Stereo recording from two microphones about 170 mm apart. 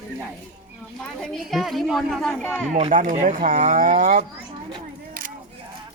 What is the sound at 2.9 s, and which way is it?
Speech, 50° right (ahead or behind).